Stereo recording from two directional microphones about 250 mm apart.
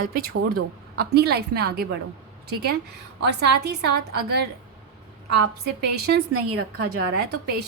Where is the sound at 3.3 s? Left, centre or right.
Right.